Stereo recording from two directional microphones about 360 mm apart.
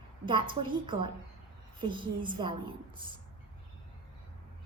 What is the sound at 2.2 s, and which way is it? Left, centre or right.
Speech, centre.